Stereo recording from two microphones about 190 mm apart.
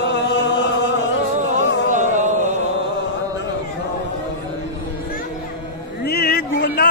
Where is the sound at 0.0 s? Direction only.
70° left (ahead or behind).